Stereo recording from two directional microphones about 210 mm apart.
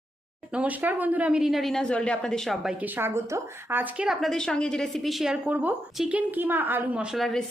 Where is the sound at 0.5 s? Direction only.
5° right (ahead or behind).